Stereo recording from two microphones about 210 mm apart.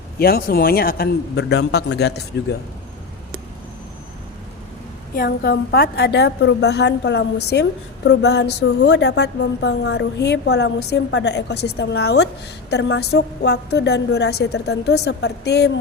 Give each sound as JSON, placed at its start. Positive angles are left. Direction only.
{"t": 0.2, "sound": "a woman's voice", "side_deg": 45}
{"t": 5.1, "sound": "a woman's voice", "side_deg": 45}